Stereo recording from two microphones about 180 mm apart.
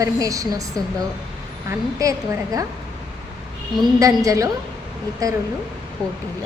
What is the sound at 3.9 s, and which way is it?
A woman's voice, 20° right (ahead or behind).